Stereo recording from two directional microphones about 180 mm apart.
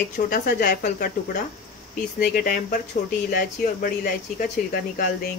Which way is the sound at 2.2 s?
60° left (ahead or behind).